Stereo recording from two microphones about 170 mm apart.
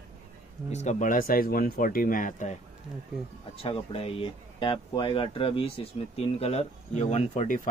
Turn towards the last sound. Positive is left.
turn(degrees=40)  # may be behind; listen again after turning